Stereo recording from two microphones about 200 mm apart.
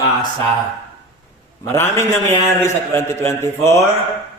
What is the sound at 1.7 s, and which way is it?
A man's voice, 10° left (ahead or behind).